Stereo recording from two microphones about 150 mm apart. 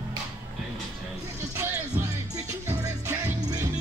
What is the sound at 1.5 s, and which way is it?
Music, 20° right (ahead or behind).